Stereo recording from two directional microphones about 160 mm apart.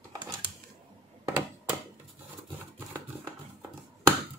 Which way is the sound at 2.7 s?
20° right (ahead or behind).